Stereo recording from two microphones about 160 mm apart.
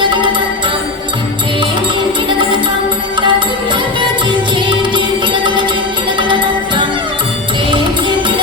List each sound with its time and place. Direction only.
0.0 s music: 30° right (ahead or behind)
3.2 s music: 30° right (ahead or behind)